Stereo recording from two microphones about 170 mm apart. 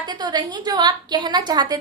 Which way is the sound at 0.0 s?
25° right (ahead or behind).